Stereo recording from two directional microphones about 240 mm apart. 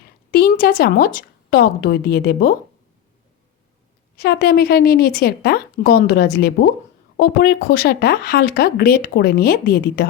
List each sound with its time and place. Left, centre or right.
0.3 s a sound: left
0.6 s speech: left
4.2 s speech: left